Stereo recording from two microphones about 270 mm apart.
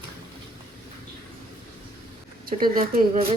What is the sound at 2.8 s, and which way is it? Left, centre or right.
Speech, right.